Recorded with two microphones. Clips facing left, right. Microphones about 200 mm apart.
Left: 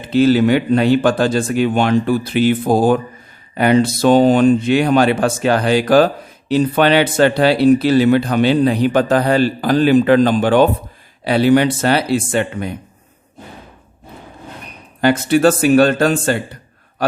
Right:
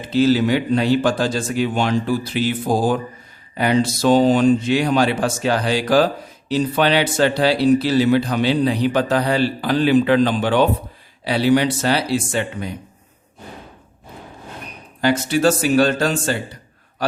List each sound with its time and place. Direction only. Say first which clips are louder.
0.1 s speech: left 4 dB; 55° left (ahead or behind)
15.0 s a man's voice: left 4 dB; 55° left (ahead or behind)